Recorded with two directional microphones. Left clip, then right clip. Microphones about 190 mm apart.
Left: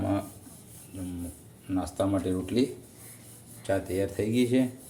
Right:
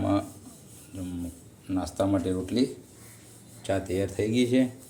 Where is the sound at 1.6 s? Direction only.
5° right (ahead or behind).